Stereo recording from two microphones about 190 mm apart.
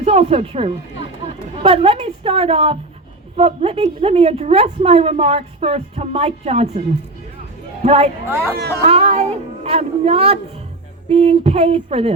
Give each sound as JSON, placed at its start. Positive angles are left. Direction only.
{"t": 0.0, "sound": "a woman's voice", "side_deg": -35}
{"t": 8.3, "sound": "speech", "side_deg": -10}
{"t": 8.9, "sound": "a woman's voice", "side_deg": -30}